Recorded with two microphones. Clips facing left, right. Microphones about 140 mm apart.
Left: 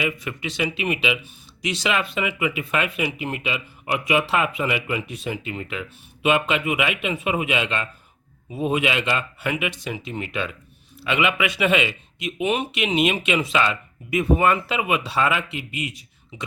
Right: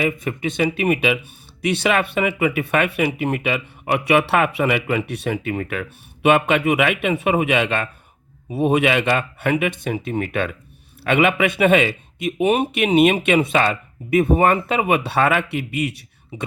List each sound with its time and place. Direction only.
0.0 s speech: 45° right (ahead or behind); by 16.0 s 65° right (ahead or behind)